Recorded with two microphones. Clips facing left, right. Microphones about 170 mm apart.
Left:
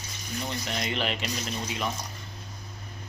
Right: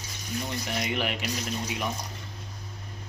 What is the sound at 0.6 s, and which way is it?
Speech, 15° right (ahead or behind).